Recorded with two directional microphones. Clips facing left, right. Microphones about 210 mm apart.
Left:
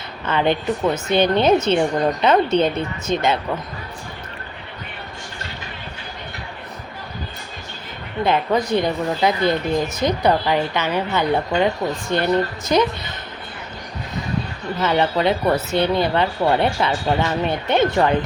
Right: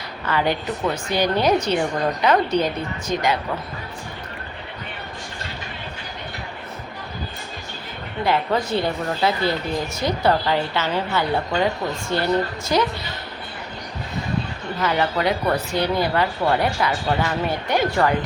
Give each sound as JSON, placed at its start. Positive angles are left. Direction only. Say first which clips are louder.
{"t": 0.3, "sound": "speech", "louder": "left 3 dB", "side_deg": 20}
{"t": 8.2, "sound": "speech", "louder": "left 2 dB", "side_deg": 20}
{"t": 14.8, "sound": "speech", "louder": "left 3 dB", "side_deg": 25}